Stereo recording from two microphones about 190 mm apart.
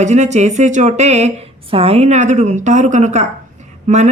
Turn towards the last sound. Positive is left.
turn(degrees=-40)  # may be behind; listen again after turning